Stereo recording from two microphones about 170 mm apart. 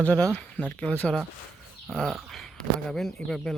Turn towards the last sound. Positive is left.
turn(degrees=0)  # may be behind; listen again after turning